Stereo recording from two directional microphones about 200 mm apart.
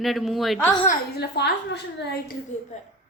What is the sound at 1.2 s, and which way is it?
A woman's voice, 55° left (ahead or behind).